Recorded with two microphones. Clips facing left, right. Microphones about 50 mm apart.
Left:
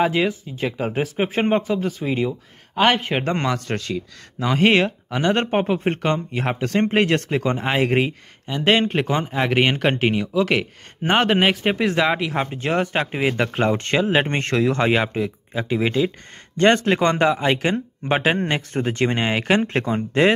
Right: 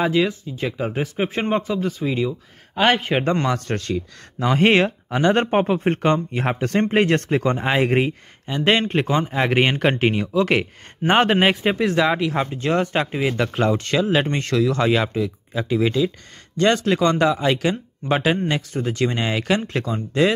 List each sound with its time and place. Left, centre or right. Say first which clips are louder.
0.0 s speech: even; centre
2.0 s speech: even; centre
2.7 s speech: even; centre
4.4 s speech: right 1 dB; centre
11.8 s speech: right 1 dB; centre
13.1 s speech: even; left